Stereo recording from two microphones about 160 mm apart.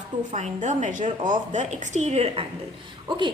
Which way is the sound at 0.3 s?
50° right (ahead or behind).